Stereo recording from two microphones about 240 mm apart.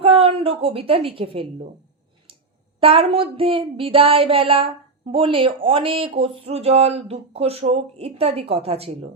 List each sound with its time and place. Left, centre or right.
0.0 s a woman's voice: right
2.8 s speech: right